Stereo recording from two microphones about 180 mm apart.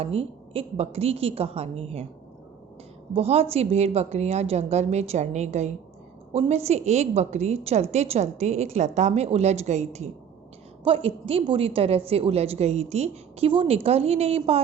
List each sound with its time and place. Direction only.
0.0 s a woman's voice: 35° right (ahead or behind)
3.1 s a woman's voice: 35° right (ahead or behind)